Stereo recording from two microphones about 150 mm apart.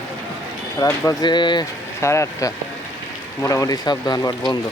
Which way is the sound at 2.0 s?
20° left (ahead or behind).